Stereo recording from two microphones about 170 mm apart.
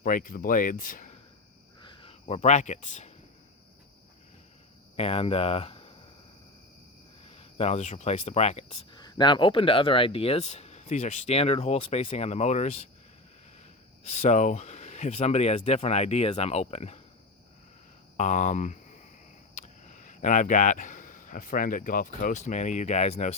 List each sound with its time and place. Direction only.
0.0 s speech: 55° left (ahead or behind)
1.8 s speech: 30° left (ahead or behind); by 3.1 s 45° left (ahead or behind)
4.9 s speech: 35° left (ahead or behind)
7.3 s speech: 35° left (ahead or behind)
8.9 s speech: 25° left (ahead or behind)
14.1 s speech: 40° left (ahead or behind)
18.2 s speech: 45° left (ahead or behind)